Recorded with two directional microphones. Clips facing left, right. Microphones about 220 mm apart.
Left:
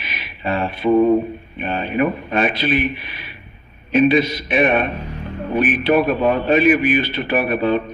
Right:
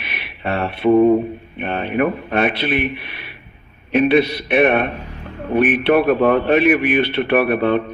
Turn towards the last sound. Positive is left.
turn(degrees=-60)  # may be behind; listen again after turning